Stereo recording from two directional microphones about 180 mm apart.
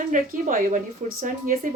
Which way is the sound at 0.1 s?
50° right (ahead or behind).